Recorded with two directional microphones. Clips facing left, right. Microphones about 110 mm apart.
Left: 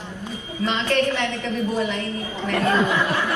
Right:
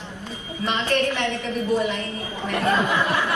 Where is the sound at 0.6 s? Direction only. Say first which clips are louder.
Left 1 dB; 15° right (ahead or behind).